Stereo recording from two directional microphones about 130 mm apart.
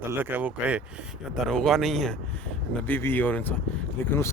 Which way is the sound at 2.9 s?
15° left (ahead or behind).